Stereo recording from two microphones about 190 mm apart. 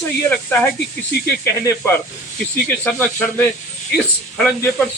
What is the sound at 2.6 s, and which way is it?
Speech, 10° left (ahead or behind).